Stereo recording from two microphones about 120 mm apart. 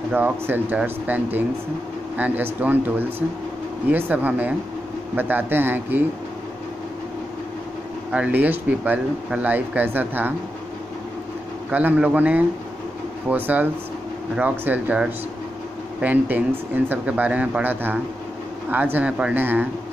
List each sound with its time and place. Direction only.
0.1 s speech: 15° right (ahead or behind)
8.1 s speech: 10° right (ahead or behind)
11.7 s speech: 15° right (ahead or behind)